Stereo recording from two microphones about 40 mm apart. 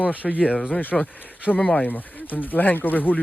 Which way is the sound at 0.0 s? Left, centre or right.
Left.